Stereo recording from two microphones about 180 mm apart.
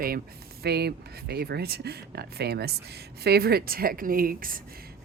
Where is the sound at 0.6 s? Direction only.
65° right (ahead or behind).